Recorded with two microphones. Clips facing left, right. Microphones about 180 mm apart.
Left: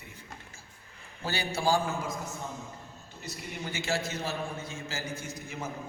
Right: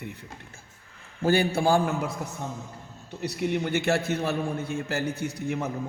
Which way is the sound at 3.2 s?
65° right (ahead or behind).